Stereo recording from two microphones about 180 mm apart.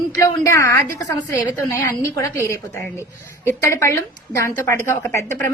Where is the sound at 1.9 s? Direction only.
15° left (ahead or behind).